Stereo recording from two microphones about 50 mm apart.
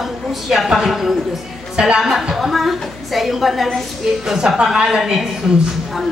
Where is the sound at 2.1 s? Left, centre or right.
Centre.